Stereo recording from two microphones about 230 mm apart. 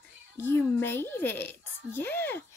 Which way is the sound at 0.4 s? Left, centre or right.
Centre.